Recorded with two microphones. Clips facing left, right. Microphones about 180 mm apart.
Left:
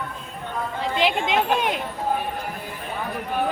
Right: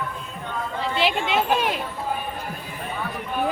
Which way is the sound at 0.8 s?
15° left (ahead or behind).